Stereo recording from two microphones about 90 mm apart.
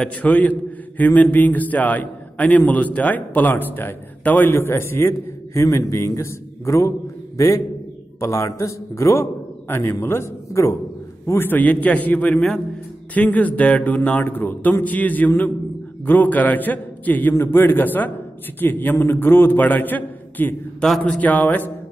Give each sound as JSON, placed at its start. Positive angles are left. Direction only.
{"t": 0.0, "sound": "a man's voice", "side_deg": 15}
{"t": 20.8, "sound": "a man's voice", "side_deg": 10}